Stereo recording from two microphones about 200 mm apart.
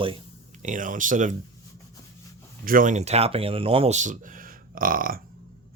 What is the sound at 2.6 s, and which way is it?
Speech, 45° right (ahead or behind).